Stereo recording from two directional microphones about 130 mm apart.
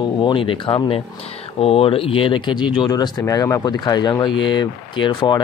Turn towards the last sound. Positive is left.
turn(degrees=35)  # may be behind; listen again after turning